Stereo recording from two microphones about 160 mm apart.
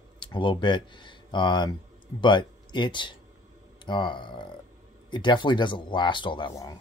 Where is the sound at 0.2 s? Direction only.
30° left (ahead or behind).